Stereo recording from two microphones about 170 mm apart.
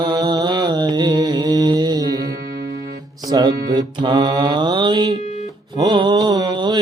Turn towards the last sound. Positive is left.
turn(degrees=-25)  # may be behind; listen again after turning